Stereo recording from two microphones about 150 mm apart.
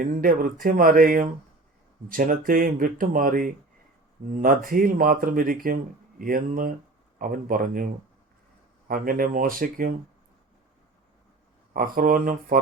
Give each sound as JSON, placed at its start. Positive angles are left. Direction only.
{"t": 0.0, "sound": "speech", "side_deg": -65}
{"t": 8.9, "sound": "speech", "side_deg": -70}
{"t": 11.9, "sound": "speech", "side_deg": -65}